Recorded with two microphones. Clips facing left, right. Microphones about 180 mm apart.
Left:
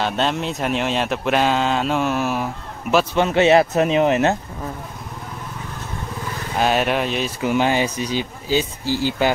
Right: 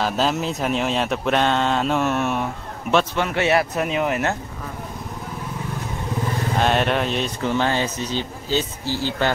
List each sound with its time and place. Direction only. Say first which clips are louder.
0.0 s speech: even; centre (ahead or behind)
3.2 s speech: left 5 dB; 25° left (ahead or behind)
6.6 s speech: left 2 dB; 5° left (ahead or behind)